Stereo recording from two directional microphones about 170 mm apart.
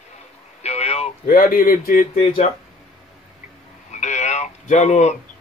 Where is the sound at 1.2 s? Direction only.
60° left (ahead or behind).